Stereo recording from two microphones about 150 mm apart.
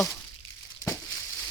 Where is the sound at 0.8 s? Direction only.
15° left (ahead or behind).